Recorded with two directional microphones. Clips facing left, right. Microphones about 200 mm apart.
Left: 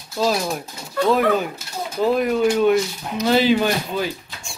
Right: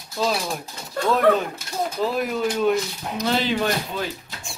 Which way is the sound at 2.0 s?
Centre (ahead or behind).